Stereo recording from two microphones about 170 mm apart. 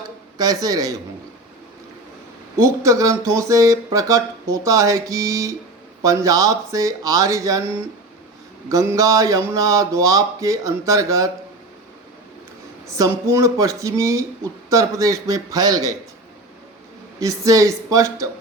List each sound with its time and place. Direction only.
0.6 s speech: 20° right (ahead or behind)
2.6 s speech: 20° right (ahead or behind)
8.7 s speech: 20° right (ahead or behind)
13.0 s speech: 20° right (ahead or behind)
17.2 s speech: 20° right (ahead or behind)